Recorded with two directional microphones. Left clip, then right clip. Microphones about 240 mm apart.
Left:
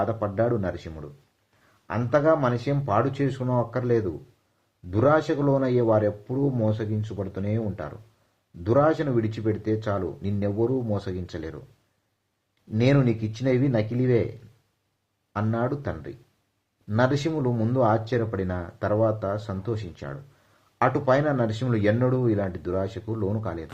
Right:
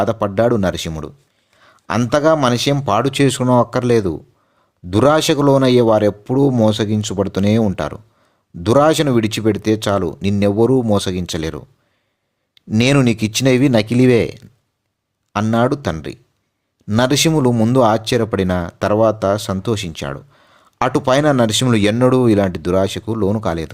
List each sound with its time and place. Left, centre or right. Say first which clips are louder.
0.0 s speech: right 9 dB; right
12.7 s speech: right 8 dB; right